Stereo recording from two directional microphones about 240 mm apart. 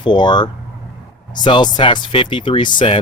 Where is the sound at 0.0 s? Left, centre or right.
Centre.